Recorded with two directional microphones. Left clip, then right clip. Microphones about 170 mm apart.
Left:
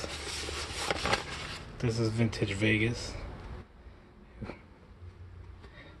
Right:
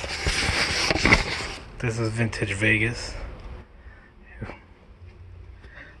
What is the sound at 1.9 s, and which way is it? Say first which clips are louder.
A man's voice: right 4 dB; centre (ahead or behind).